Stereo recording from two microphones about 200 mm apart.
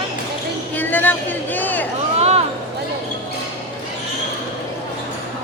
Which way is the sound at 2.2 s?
30° right (ahead or behind).